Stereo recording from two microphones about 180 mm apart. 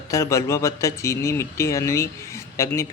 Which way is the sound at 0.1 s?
15° left (ahead or behind).